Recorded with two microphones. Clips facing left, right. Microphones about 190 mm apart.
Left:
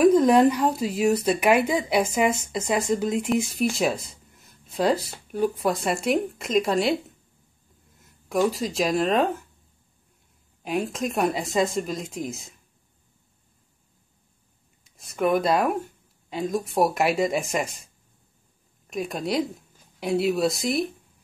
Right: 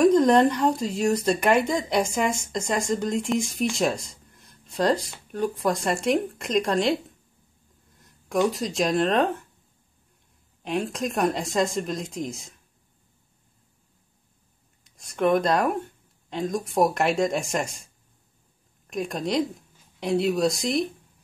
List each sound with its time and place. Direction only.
0.0 s speech: 5° left (ahead or behind)
8.0 s speech: 5° left (ahead or behind)
10.6 s speech: centre (ahead or behind)
15.0 s speech: centre (ahead or behind)
18.9 s speech: centre (ahead or behind)